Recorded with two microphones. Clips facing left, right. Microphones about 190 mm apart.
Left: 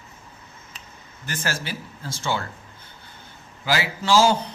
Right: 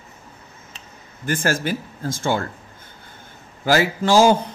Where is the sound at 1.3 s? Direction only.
50° right (ahead or behind).